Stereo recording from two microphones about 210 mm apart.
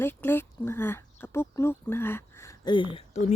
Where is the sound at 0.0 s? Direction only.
10° left (ahead or behind).